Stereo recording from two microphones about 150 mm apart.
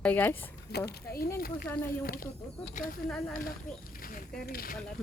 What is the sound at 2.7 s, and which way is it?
Speech, 70° left (ahead or behind).